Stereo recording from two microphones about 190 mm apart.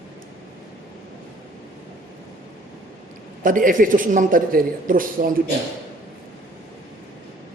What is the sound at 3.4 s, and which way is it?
A man's voice, 45° right (ahead or behind).